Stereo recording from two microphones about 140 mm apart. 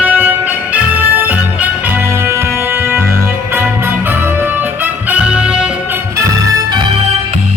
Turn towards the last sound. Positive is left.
turn(degrees=-5)  # may be behind; listen again after turning